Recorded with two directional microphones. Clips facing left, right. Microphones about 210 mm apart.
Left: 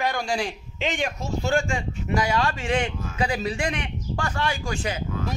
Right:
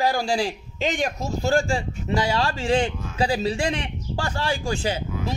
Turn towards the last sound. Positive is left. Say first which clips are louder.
# right 4 dB
turn(degrees=-30)  # may be behind; listen again after turning